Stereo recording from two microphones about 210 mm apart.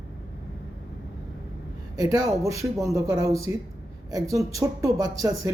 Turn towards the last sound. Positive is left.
turn(degrees=-15)  # may be behind; listen again after turning